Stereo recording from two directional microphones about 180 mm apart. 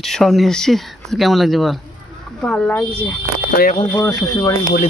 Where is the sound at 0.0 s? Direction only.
Centre (ahead or behind).